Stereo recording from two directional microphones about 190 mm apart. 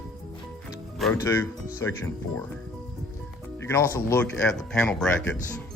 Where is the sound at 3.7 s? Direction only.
15° left (ahead or behind).